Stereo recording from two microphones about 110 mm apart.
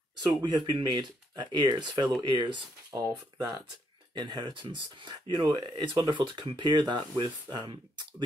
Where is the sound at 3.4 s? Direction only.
35° right (ahead or behind).